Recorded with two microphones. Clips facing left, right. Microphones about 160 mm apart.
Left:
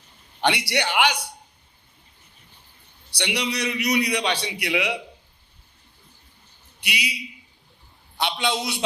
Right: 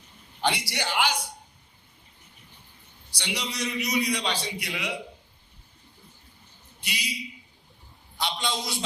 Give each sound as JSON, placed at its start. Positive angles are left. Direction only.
{"t": 0.4, "sound": "a man's voice", "side_deg": 65}
{"t": 3.1, "sound": "a man's voice", "side_deg": 65}
{"t": 6.8, "sound": "a man's voice", "side_deg": 65}
{"t": 8.2, "sound": "a man's voice", "side_deg": 65}